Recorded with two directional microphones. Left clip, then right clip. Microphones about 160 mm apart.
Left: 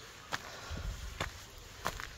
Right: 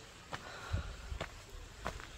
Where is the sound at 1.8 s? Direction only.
90° left.